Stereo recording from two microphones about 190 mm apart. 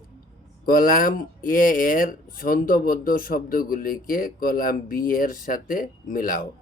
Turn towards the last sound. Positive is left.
turn(degrees=45)  # may be behind; listen again after turning